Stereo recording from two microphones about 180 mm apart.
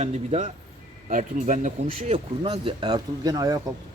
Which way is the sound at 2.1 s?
30° right (ahead or behind).